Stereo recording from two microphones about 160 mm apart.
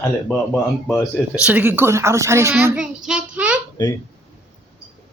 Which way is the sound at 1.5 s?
10° right (ahead or behind).